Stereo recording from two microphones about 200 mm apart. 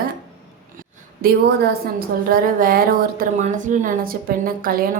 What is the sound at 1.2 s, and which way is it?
A woman's voice, 50° right (ahead or behind).